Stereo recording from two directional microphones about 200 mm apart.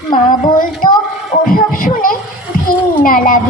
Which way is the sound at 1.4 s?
45° left (ahead or behind).